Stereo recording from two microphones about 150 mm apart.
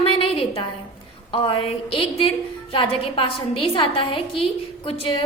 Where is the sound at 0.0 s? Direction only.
35° left (ahead or behind).